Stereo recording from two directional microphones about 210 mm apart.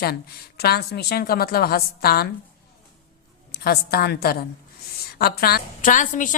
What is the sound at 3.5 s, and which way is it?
A woman's voice, 45° left (ahead or behind).